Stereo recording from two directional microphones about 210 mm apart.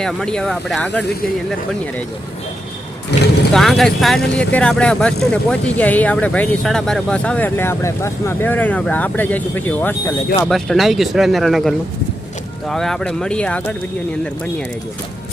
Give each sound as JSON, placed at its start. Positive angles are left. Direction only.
{"t": 0.0, "sound": "speech", "side_deg": 5}
{"t": 3.1, "sound": "vehicle", "side_deg": 55}
{"t": 3.5, "sound": "speech", "side_deg": 0}